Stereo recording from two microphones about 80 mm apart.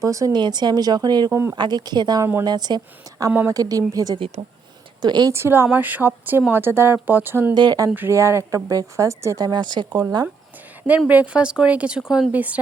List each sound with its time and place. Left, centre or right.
0.0 s speech: right
0.3 s a woman's voice: right
1.3 s speech: right
1.5 s a woman's voice: right
5.0 s a woman's voice: right
5.3 s speech: right
7.5 s a woman's voice: right
8.1 s speech: right
9.5 s a woman's voice: right
11.1 s speech: centre
12.3 s speech: centre